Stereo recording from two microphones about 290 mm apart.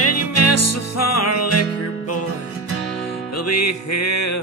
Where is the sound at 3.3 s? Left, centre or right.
Left.